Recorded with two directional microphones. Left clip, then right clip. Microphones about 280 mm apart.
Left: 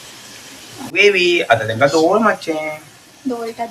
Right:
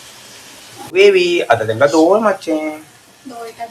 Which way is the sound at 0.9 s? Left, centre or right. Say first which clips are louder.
Right 2 dB; centre.